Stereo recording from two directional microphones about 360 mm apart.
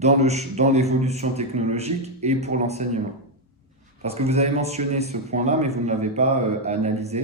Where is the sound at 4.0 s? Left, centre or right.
Centre.